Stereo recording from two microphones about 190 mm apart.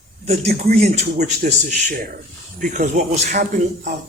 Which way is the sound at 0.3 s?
35° right (ahead or behind).